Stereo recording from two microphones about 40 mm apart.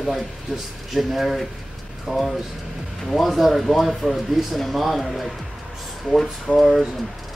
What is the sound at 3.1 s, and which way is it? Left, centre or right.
Speech, centre.